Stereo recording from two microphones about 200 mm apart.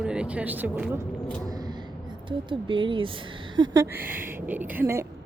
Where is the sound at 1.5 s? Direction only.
20° right (ahead or behind).